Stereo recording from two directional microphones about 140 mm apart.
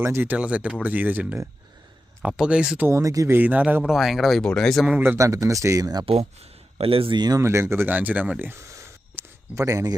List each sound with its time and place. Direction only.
0.0 s speech: 15° right (ahead or behind); by 4.9 s 5° left (ahead or behind)
4.9 s a man's voice: 15° right (ahead or behind)
6.1 s speech: 45° right (ahead or behind); by 9.9 s 25° right (ahead or behind)